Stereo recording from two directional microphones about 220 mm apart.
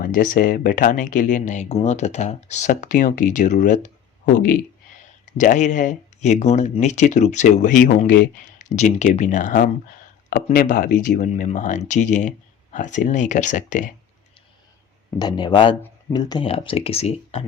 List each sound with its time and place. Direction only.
0.0 s speech: 40° left (ahead or behind)
15.2 s speech: 20° left (ahead or behind)